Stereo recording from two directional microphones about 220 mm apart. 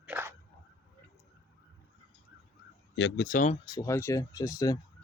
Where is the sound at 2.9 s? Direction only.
55° left (ahead or behind).